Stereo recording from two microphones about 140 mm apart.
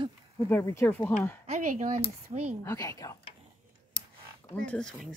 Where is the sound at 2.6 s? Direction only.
20° left (ahead or behind).